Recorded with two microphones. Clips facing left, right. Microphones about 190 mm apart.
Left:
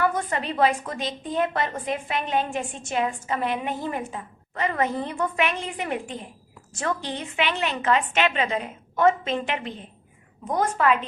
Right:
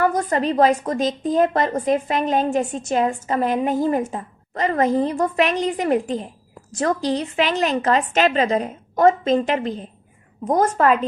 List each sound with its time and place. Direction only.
0.0 s a woman's voice: 40° right (ahead or behind)